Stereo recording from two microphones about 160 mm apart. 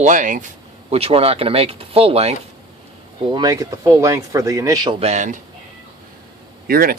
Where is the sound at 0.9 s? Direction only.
40° right (ahead or behind).